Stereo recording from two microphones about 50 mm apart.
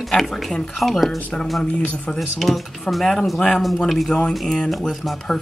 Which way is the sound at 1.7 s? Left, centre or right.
Left.